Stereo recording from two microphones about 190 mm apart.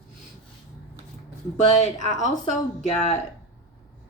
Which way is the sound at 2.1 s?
40° left (ahead or behind).